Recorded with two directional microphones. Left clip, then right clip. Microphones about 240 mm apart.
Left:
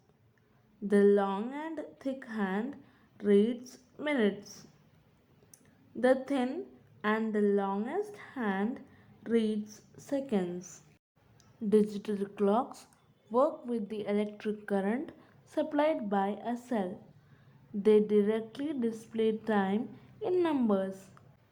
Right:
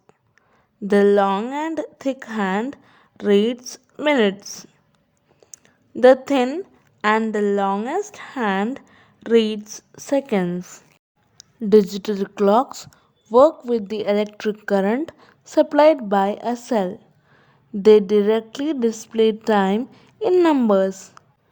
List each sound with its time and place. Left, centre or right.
0.9 s a woman's voice: right
6.0 s a woman's voice: right